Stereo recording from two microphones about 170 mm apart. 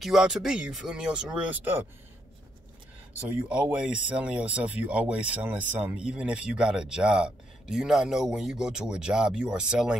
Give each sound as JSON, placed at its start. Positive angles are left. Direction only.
{"t": 0.0, "sound": "speech", "side_deg": 0}
{"t": 3.3, "sound": "speech", "side_deg": -10}